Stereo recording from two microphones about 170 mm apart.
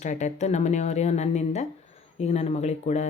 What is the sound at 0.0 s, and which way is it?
A woman's voice, 45° left (ahead or behind).